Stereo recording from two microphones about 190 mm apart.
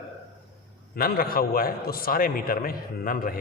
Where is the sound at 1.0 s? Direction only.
50° left (ahead or behind).